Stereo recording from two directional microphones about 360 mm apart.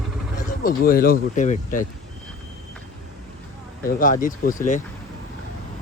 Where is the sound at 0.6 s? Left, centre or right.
Left.